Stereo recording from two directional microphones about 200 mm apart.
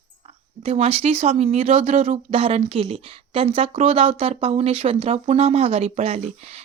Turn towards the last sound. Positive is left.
turn(degrees=-30)  # may be behind; listen again after turning